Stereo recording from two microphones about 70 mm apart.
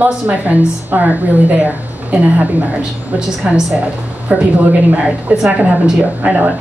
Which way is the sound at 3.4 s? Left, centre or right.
Centre.